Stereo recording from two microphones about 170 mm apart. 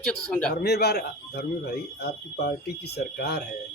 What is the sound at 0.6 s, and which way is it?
Speech, 75° left (ahead or behind).